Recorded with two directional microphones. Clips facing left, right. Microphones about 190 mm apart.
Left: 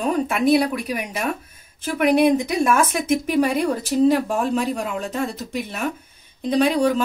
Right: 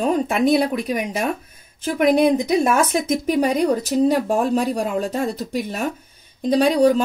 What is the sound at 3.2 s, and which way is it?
A woman's voice, 40° right (ahead or behind).